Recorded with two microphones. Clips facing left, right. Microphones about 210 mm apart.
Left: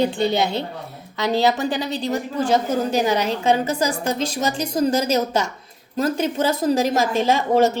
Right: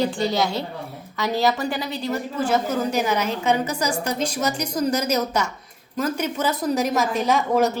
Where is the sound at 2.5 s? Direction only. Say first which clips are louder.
Left 3 dB; 30° left (ahead or behind).